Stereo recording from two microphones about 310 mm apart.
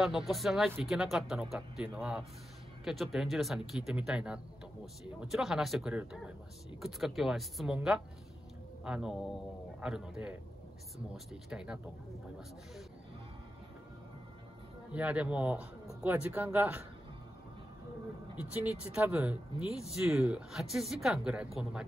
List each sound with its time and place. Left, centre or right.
0.0 s speech: centre
11.5 s speech: centre
14.9 s speech: centre
18.4 s speech: centre